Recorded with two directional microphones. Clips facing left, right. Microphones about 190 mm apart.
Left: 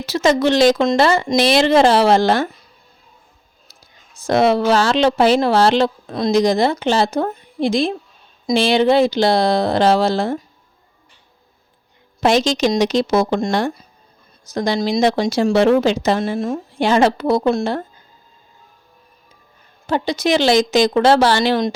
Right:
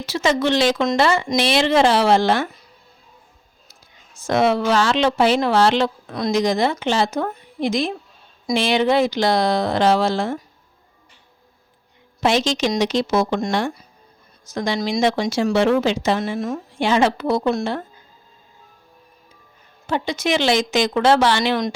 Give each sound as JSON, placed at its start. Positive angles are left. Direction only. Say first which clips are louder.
{"t": 0.0, "sound": "speech", "louder": "left 4 dB", "side_deg": 40}
{"t": 4.2, "sound": "speech", "louder": "left 3 dB", "side_deg": 35}
{"t": 12.2, "sound": "speech", "louder": "left 3 dB", "side_deg": 40}
{"t": 19.9, "sound": "speech", "louder": "left 4 dB", "side_deg": 35}